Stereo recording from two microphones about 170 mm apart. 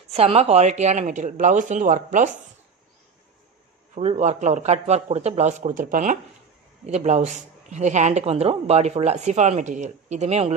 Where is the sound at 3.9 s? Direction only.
40° right (ahead or behind).